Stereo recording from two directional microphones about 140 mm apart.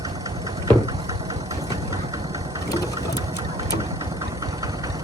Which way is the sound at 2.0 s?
25° right (ahead or behind).